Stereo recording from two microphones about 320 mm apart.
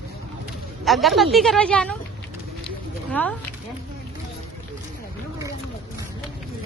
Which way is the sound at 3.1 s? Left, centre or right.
Centre.